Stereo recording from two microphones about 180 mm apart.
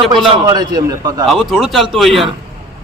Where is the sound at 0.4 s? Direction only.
20° right (ahead or behind).